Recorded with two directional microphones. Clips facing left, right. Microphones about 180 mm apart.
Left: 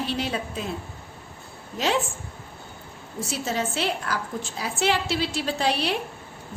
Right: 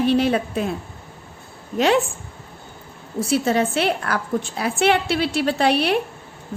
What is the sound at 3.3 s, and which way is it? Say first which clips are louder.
A woman's voice: right 9 dB; 60° right (ahead or behind).